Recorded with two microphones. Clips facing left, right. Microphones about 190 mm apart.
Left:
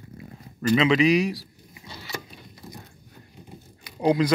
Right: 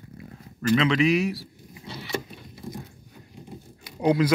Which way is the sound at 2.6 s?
15° right (ahead or behind).